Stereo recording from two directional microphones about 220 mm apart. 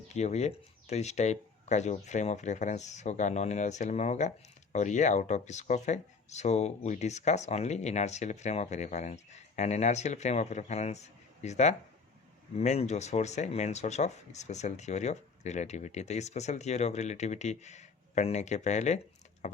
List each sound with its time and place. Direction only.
0.1 s speech: 30° left (ahead or behind)